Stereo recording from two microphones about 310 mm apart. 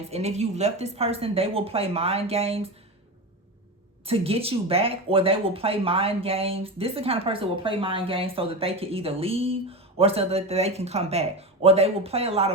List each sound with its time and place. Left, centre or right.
0.1 s speech: right
4.0 s speech: centre